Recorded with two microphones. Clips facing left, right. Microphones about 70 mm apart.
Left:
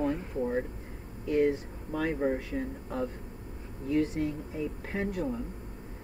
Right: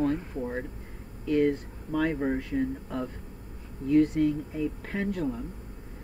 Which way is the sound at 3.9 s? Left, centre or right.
Right.